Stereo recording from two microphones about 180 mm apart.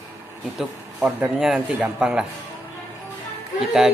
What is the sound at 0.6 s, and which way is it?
A man's voice, centre (ahead or behind).